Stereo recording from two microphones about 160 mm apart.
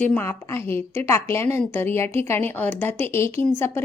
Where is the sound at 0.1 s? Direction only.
15° left (ahead or behind).